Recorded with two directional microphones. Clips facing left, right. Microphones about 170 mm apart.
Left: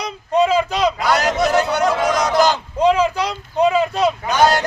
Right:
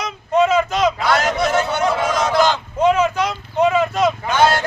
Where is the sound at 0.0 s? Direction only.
35° left (ahead or behind).